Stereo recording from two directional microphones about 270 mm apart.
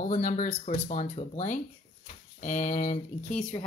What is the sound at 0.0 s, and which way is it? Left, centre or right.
Speech, left.